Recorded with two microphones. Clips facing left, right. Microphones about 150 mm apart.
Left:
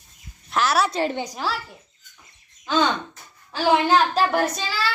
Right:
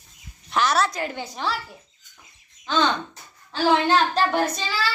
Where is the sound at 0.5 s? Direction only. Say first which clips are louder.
Even; 5° left (ahead or behind).